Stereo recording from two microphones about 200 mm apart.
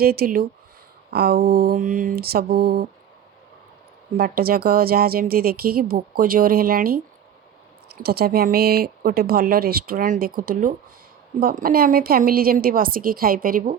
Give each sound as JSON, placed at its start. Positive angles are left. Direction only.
{"t": 0.0, "sound": "a woman's voice", "side_deg": -50}
{"t": 4.2, "sound": "a woman's voice", "side_deg": -50}